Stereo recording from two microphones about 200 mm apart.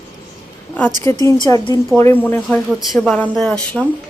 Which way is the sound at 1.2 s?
15° left (ahead or behind).